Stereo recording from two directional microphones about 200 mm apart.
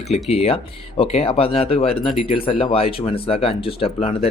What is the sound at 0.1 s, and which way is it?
Speech, 30° left (ahead or behind).